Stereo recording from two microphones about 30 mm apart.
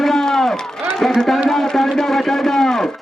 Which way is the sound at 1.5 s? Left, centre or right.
Centre.